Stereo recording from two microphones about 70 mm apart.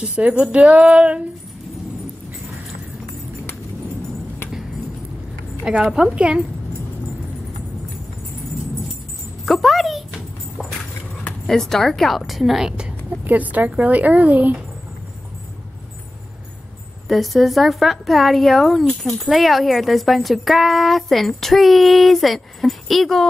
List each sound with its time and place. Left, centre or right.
0.0 s music: centre
0.3 s music: centre
0.6 s music: centre
5.6 s music: centre
9.5 s speech: centre
11.4 s speech: centre
13.2 s a woman's voice: right
17.1 s speech: centre